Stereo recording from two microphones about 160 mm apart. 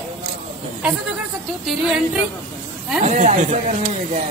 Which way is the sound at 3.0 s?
45° right (ahead or behind).